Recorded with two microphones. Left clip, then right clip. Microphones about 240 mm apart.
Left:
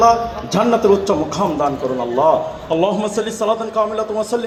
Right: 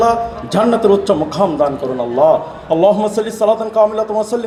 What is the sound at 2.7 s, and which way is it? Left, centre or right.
A man's voice, right.